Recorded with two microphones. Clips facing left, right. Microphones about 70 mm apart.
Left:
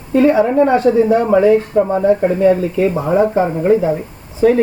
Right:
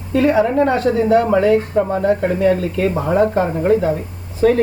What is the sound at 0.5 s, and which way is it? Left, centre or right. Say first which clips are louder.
Speech: left 4 dB; centre.